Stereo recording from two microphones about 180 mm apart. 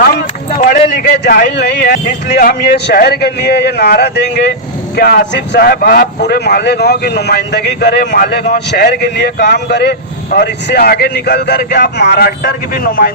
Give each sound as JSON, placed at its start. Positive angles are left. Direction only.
{"t": 1.2, "sound": "speech", "side_deg": 65}